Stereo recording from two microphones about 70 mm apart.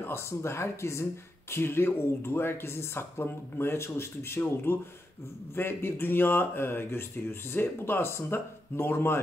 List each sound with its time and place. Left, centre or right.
0.0 s speech: left